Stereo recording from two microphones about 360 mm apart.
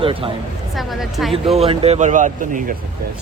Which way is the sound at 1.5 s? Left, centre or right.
Centre.